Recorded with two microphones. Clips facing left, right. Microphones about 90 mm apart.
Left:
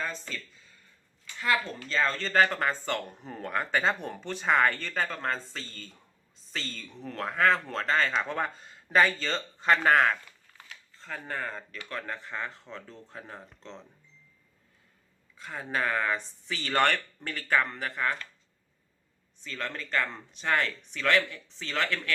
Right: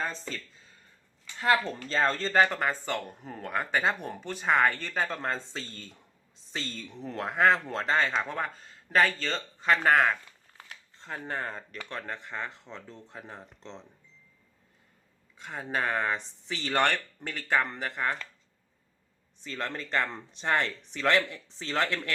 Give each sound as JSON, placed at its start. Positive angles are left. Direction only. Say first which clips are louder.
{"t": 0.0, "sound": "speech", "louder": "right 1 dB", "side_deg": -30}
{"t": 1.4, "sound": "speech", "louder": "right 3 dB", "side_deg": -35}
{"t": 2.3, "sound": "speech", "louder": "left 2 dB", "side_deg": -10}
{"t": 8.6, "sound": "speech", "louder": "left 1 dB", "side_deg": 5}
{"t": 11.0, "sound": "speech", "louder": "right 1 dB", "side_deg": -20}
{"t": 15.4, "sound": "speech", "louder": "even", "side_deg": -15}
{"t": 19.4, "sound": "speech", "louder": "right 1 dB", "side_deg": -25}